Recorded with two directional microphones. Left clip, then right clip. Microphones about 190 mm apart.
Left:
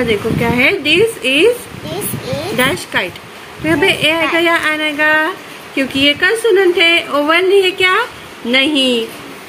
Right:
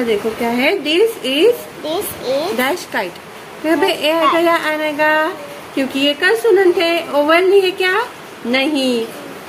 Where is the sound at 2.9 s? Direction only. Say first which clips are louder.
Left 3 dB; 10° left (ahead or behind).